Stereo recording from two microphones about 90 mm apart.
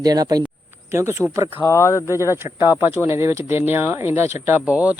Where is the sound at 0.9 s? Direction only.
30° right (ahead or behind).